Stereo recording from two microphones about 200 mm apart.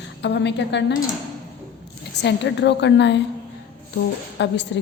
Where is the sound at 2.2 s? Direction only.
60° left (ahead or behind).